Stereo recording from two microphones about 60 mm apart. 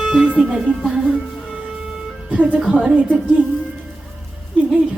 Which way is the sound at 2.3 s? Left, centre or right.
Right.